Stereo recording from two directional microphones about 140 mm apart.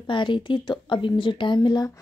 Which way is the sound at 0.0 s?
35° left (ahead or behind).